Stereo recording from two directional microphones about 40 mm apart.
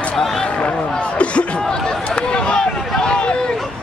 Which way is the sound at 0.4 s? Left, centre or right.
Left.